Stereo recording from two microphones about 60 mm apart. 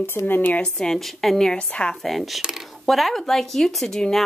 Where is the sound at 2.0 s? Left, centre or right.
Centre.